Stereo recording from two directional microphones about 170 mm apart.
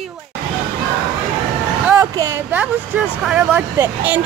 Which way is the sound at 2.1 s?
15° right (ahead or behind).